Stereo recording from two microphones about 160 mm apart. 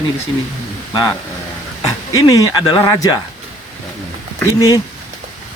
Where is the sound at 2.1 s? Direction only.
20° left (ahead or behind).